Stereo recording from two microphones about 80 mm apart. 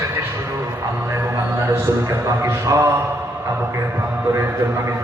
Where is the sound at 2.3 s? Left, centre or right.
Right.